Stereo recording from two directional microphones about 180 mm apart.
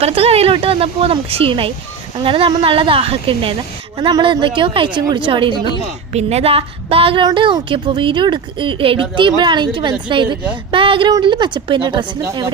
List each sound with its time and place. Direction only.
0.0 s a woman's voice: 35° right (ahead or behind)